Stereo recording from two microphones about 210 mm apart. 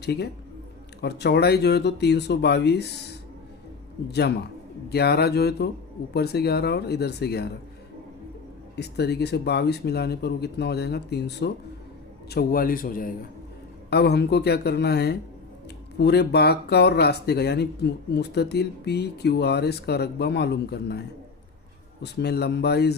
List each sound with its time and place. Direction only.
0.0 s speech: 50° left (ahead or behind)
4.1 s speech: 50° left (ahead or behind)
8.7 s speech: 50° left (ahead or behind)
22.0 s speech: 50° left (ahead or behind)